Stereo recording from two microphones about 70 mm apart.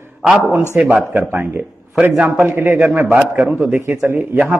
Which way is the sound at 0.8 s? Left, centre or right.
Right.